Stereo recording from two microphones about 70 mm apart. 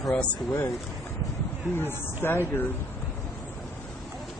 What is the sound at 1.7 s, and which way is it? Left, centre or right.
Speech, left.